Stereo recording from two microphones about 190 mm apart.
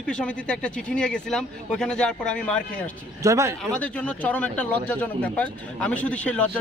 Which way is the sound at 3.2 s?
15° right (ahead or behind).